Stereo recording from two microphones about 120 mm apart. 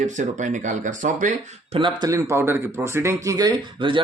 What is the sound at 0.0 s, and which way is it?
Speech, 90° right.